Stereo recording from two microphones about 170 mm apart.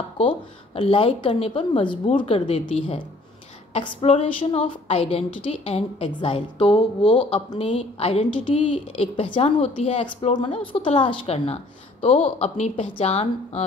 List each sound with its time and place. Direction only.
0.7 s a woman's voice: 30° left (ahead or behind)
3.7 s a woman's voice: 35° left (ahead or behind)